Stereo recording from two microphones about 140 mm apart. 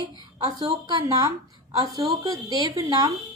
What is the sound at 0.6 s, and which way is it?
A woman's voice, 30° right (ahead or behind).